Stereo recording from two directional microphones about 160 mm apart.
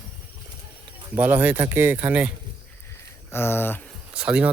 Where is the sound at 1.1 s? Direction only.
10° right (ahead or behind).